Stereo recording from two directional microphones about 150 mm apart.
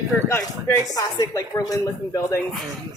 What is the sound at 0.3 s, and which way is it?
Speech, 15° left (ahead or behind).